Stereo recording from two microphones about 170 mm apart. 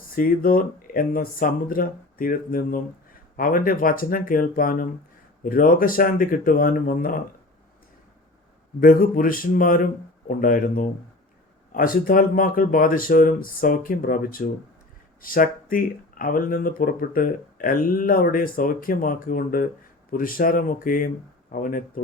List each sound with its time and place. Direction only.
0.1 s speech: 55° left (ahead or behind)
8.8 s speech: 55° left (ahead or behind)